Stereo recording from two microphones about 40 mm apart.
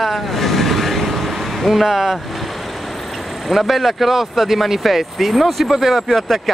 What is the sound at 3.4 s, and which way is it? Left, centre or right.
Speech, centre.